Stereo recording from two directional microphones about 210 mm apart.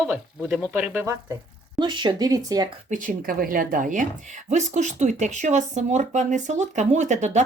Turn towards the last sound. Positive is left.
turn(degrees=-35)  # may be behind; listen again after turning